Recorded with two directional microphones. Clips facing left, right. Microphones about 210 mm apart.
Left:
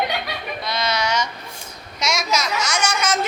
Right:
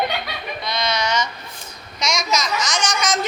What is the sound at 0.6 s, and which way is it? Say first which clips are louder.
A woman's voice: even; 5° left (ahead or behind).